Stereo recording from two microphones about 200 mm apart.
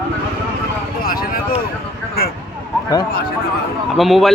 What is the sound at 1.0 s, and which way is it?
Speech, 45° left (ahead or behind).